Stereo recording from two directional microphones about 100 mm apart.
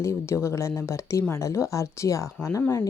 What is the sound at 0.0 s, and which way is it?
A woman's voice, 30° left (ahead or behind).